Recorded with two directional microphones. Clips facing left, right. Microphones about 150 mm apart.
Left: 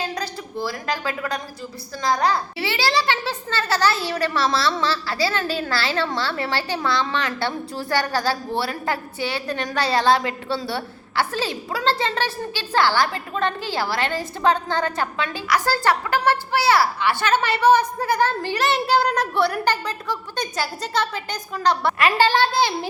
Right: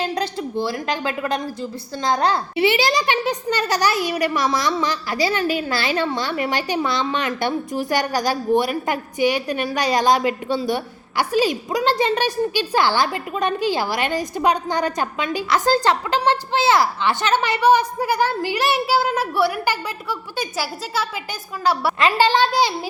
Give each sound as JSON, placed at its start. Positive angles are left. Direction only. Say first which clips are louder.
{"t": 0.1, "sound": "speech", "louder": "right 5 dB", "side_deg": -25}
{"t": 2.1, "sound": "a child's voice", "louder": "right 3 dB", "side_deg": -20}
{"t": 21.9, "sound": "a child's voice", "louder": "right 1 dB", "side_deg": -20}